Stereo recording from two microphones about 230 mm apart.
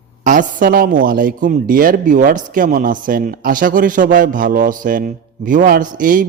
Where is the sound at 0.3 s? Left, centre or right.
Right.